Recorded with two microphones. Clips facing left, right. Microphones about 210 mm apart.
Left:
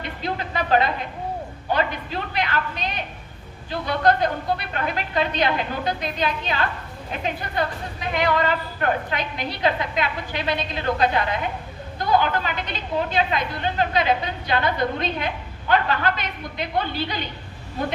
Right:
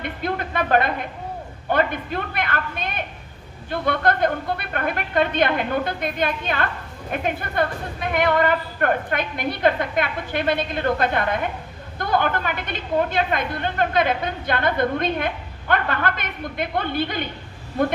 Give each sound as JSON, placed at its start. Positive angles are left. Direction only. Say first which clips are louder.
{"t": 0.0, "sound": "a woman's voice", "louder": "right 2 dB", "side_deg": -55}